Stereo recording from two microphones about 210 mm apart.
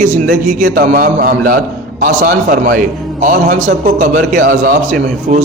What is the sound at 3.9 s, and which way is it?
A man's voice, 40° right (ahead or behind).